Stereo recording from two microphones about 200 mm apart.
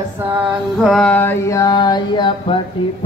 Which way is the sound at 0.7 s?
Centre (ahead or behind).